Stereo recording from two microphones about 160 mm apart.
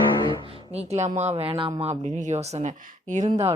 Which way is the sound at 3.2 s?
40° right (ahead or behind).